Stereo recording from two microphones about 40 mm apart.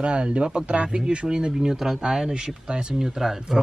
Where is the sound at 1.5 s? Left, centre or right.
Centre.